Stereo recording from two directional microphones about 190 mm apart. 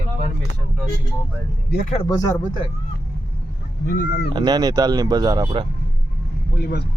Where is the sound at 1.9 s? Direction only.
20° left (ahead or behind).